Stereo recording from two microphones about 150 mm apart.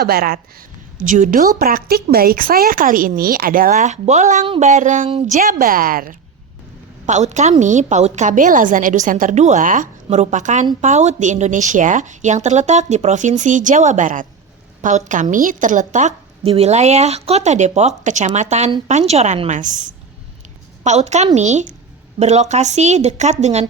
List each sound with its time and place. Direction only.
0.0 s speech: 90° right
0.9 s a woman's voice: 60° right (ahead or behind)
5.0 s speech: 40° right (ahead or behind)
5.4 s speech: 70° right (ahead or behind)
7.0 s a woman's voice: 50° right (ahead or behind)
20.8 s a woman's voice: 50° right (ahead or behind)